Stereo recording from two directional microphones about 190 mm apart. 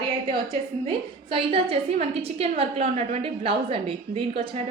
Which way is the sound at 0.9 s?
30° right (ahead or behind).